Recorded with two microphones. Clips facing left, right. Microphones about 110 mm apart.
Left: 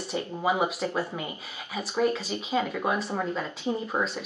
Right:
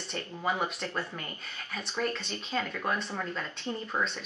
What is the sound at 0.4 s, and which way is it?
Speech, 5° left (ahead or behind).